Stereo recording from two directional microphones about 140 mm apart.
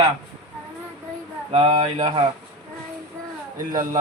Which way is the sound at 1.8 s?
55° right (ahead or behind).